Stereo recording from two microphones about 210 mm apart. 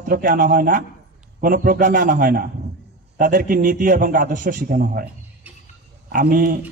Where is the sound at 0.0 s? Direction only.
40° right (ahead or behind).